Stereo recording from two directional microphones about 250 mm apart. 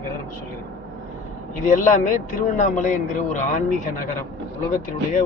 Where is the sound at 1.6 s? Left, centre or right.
Left.